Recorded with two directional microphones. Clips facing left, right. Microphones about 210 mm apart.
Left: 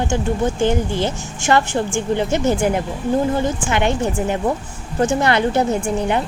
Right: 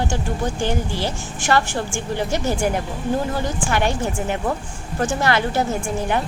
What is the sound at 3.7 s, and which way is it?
Speech, 20° left (ahead or behind).